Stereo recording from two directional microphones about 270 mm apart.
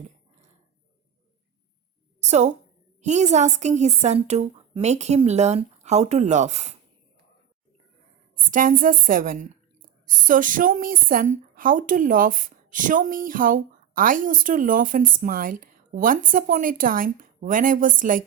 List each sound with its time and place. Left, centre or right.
2.3 s a woman's voice: right
8.4 s a woman's voice: right